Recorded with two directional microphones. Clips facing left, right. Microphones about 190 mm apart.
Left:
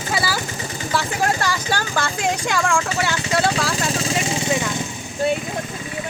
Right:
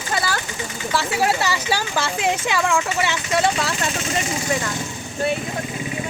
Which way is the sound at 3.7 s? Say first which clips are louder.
Left 2 dB; 35° left (ahead or behind).